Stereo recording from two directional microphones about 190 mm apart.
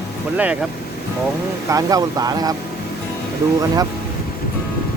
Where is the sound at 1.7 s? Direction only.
20° right (ahead or behind).